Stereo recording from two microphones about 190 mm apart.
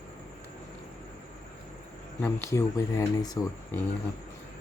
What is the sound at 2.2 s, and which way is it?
Speech, 15° left (ahead or behind).